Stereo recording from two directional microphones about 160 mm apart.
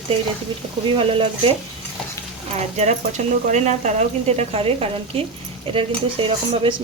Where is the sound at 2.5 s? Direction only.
45° right (ahead or behind).